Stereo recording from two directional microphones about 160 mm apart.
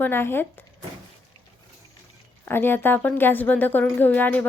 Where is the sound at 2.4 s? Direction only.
15° left (ahead or behind).